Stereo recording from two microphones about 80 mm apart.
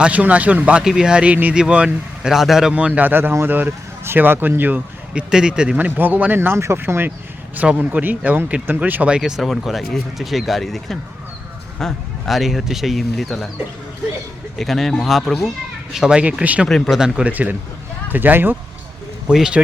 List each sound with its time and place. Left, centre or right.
0.0 s speech: centre
2.7 s speech: centre
5.3 s speech: centre
14.6 s speech: centre
16.0 s speech: centre
16.6 s speech: centre
16.9 s speech: centre
17.2 s speech: centre
19.3 s speech: centre